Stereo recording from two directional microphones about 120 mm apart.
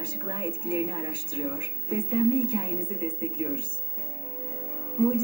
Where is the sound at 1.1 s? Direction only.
40° left (ahead or behind).